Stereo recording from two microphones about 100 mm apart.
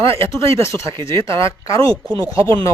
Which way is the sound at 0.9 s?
60° right (ahead or behind).